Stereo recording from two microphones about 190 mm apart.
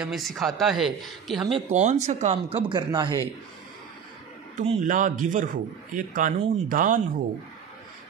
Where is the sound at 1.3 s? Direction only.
25° right (ahead or behind).